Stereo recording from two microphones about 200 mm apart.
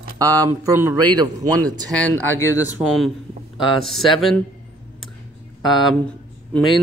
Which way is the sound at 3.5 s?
Centre (ahead or behind).